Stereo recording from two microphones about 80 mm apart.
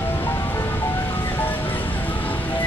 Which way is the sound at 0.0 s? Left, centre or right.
Left.